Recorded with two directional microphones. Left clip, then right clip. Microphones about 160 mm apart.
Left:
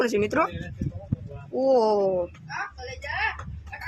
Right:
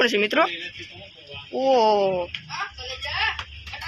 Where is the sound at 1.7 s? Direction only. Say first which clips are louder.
Right 3 dB; centre (ahead or behind).